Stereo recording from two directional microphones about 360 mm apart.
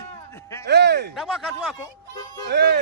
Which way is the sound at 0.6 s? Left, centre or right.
Right.